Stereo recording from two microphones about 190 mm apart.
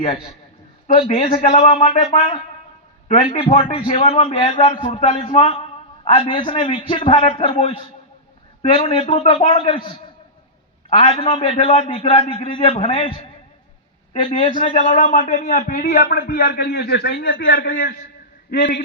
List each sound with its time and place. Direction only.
1.3 s a man's voice: 40° left (ahead or behind)
8.7 s a man's voice: 30° left (ahead or behind)
10.9 s a man's voice: 30° left (ahead or behind)
14.3 s a man's voice: 30° left (ahead or behind)
15.0 s a man's voice: 45° left (ahead or behind)
18.5 s a man's voice: 65° left (ahead or behind)